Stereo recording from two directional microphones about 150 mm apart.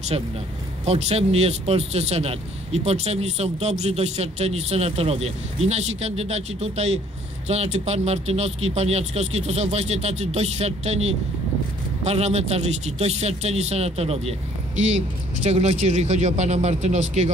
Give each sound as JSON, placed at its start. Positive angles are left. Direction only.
{"t": 0.1, "sound": "a man's voice", "side_deg": -35}